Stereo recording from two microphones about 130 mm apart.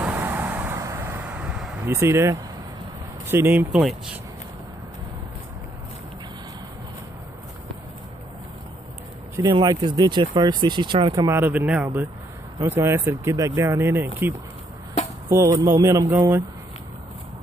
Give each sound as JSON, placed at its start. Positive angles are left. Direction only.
{"t": 0.0, "sound": "vehicle", "side_deg": -15}
{"t": 1.9, "sound": "speech", "side_deg": -20}
{"t": 9.4, "sound": "speech", "side_deg": -35}
{"t": 11.2, "sound": "speech", "side_deg": -20}
{"t": 11.6, "sound": "speech", "side_deg": -10}
{"t": 15.2, "sound": "speech", "side_deg": -25}